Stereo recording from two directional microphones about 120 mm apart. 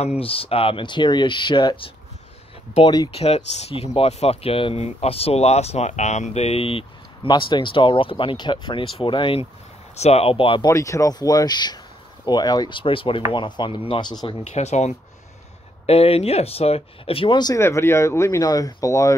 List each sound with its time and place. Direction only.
0.2 s speech: 50° left (ahead or behind)
3.1 s speech: 60° left (ahead or behind)
9.9 s speech: 60° left (ahead or behind)
10.7 s speech: 25° left (ahead or behind)
14.4 s speech: 70° left (ahead or behind)
15.9 s speech: 55° left (ahead or behind)
17.6 s speech: 20° left (ahead or behind)